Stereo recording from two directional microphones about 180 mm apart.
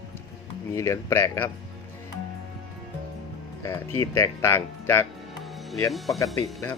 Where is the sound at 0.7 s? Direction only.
15° left (ahead or behind).